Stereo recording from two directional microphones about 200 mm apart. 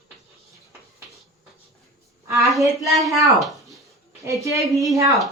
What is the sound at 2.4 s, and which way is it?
Speech, centre (ahead or behind).